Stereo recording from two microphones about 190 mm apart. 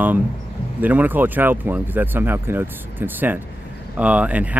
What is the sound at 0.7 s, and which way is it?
Speech, 10° right (ahead or behind).